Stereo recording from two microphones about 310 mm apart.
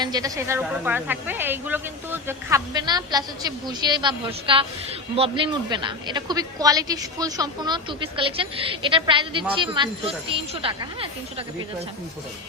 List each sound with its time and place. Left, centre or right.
0.0 s speech: centre